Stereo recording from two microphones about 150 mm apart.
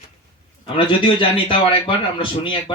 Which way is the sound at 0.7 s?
35° left (ahead or behind).